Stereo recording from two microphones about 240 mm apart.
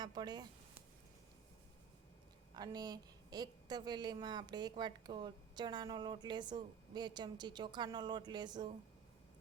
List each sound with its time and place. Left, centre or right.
0.0 s a woman's voice: centre
2.6 s a woman's voice: centre